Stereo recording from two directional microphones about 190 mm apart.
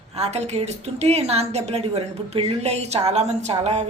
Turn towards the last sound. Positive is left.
turn(degrees=-35)  # may be behind; listen again after turning